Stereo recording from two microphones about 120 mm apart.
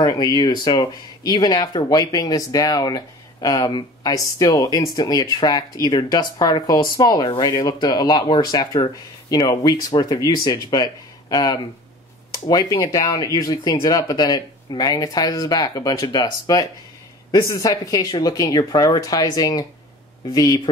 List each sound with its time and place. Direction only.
0.0 s speech: 35° left (ahead or behind)